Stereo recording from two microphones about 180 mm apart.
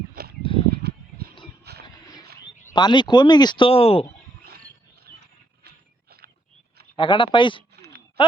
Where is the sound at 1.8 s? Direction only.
20° left (ahead or behind).